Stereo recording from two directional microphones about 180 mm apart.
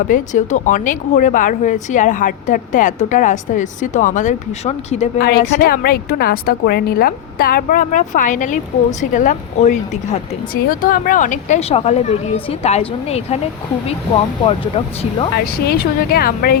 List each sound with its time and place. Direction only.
0.1 s speech: 45° left (ahead or behind)
5.2 s a woman's voice: 60° left (ahead or behind); by 13.4 s 35° left (ahead or behind)
15.6 s a woman's voice: 60° left (ahead or behind)